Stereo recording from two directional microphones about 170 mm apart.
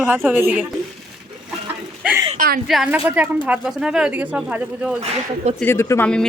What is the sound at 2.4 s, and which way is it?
Speech, 60° right (ahead or behind).